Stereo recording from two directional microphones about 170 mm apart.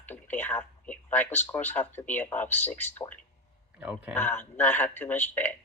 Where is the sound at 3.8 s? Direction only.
5° right (ahead or behind).